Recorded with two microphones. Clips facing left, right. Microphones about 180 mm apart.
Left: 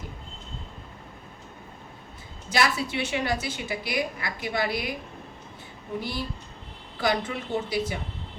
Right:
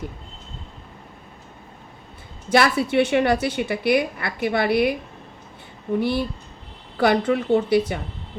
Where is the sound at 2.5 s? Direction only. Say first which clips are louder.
Right 7 dB; 60° right (ahead or behind).